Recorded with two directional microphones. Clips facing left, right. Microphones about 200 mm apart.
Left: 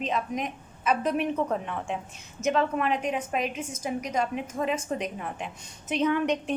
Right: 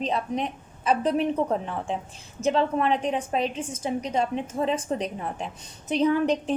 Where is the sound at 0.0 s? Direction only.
30° right (ahead or behind).